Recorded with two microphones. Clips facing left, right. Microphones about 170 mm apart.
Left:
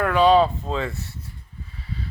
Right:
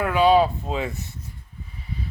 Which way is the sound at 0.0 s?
5° right (ahead or behind).